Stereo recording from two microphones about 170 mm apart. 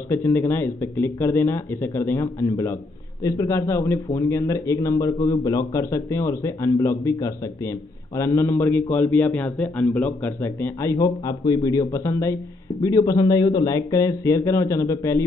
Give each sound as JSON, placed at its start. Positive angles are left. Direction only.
{"t": 0.1, "sound": "a man's voice", "side_deg": 15}